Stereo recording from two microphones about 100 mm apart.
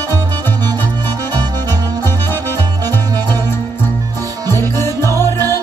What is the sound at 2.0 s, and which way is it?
Music, 20° left (ahead or behind).